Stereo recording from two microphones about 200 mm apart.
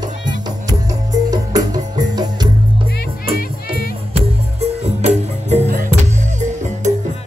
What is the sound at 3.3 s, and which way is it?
Music, 45° left (ahead or behind).